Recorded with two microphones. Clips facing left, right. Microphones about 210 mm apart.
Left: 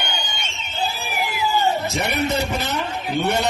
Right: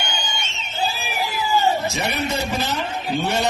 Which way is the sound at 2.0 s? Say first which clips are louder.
Left 2 dB; 60° left (ahead or behind).